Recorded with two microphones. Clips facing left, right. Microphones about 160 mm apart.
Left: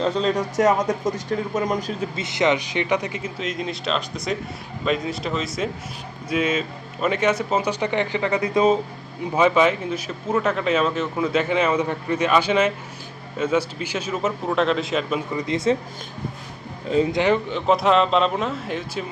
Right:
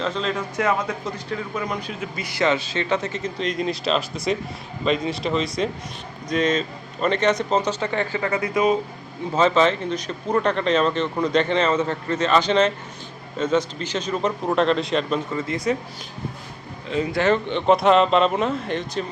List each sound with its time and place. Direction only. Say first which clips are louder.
0.0 s speech: left 4 dB; 40° left (ahead or behind)
2.1 s a man's voice: even; 20° left (ahead or behind)
9.3 s a man's voice: even; 10° left (ahead or behind)
15.3 s speech: left 2 dB; 15° left (ahead or behind)
17.1 s speech: even; 15° left (ahead or behind)
17.7 s a man's voice: right 2 dB; centre (ahead or behind)